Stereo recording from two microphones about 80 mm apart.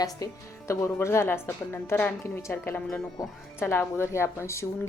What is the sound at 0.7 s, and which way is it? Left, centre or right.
A woman's voice, left.